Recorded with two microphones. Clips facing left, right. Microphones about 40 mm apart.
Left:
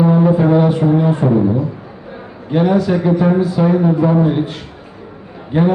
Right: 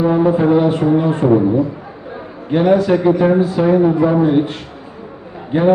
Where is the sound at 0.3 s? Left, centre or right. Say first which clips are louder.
Even; centre.